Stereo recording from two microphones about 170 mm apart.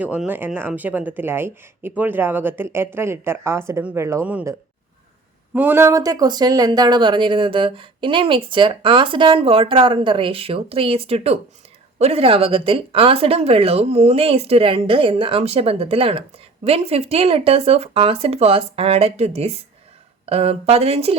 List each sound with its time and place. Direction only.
0.0 s speech: 10° right (ahead or behind)
5.5 s speech: 15° right (ahead or behind); by 21.2 s 35° right (ahead or behind)